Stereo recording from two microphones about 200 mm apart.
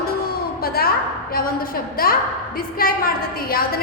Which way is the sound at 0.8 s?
50° left (ahead or behind).